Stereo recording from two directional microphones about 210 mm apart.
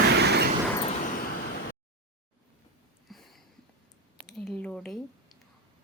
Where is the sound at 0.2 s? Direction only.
50° right (ahead or behind).